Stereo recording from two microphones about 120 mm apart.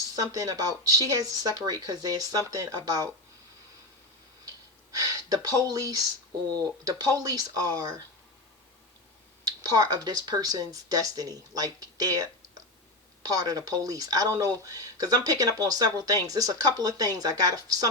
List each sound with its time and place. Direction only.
0.2 s speech: 30° right (ahead or behind)
4.4 s a sound: 30° right (ahead or behind)
6.5 s speech: 30° right (ahead or behind)
9.4 s speech: 30° right (ahead or behind)
13.2 s speech: 35° right (ahead or behind)